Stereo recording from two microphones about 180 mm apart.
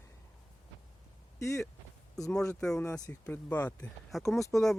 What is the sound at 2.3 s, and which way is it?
Speech, 5° left (ahead or behind).